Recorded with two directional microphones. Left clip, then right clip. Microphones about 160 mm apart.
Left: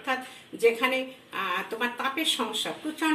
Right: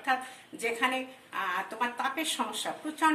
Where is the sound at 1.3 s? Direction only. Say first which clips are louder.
Left 2 dB; 40° right (ahead or behind).